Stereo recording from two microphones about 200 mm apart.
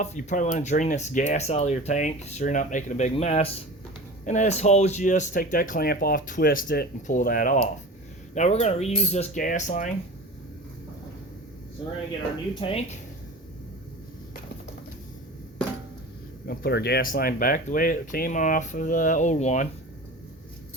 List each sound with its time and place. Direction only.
0.0 s speech: 35° left (ahead or behind)
12.5 s speech: 30° left (ahead or behind)
16.5 s speech: 55° left (ahead or behind); by 19.6 s 35° left (ahead or behind)